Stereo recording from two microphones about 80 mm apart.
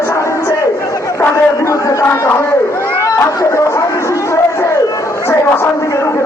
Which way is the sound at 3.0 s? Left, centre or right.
Left.